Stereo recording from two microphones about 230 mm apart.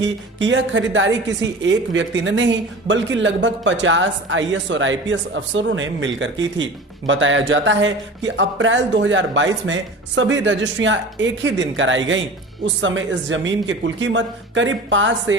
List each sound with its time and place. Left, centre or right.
0.0 s a woman's voice: right